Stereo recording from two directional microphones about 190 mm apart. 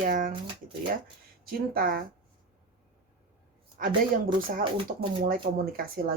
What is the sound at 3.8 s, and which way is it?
Speech, 45° right (ahead or behind).